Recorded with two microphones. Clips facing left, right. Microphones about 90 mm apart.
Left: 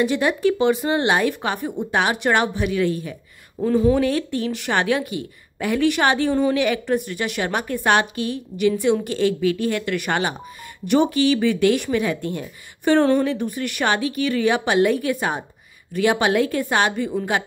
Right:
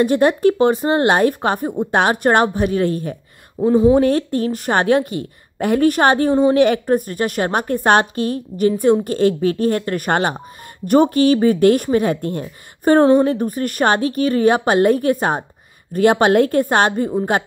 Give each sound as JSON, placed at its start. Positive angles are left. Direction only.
{"t": 0.0, "sound": "speech", "side_deg": -50}
{"t": 3.5, "sound": "speech", "side_deg": -20}
{"t": 3.9, "sound": "speech", "side_deg": -45}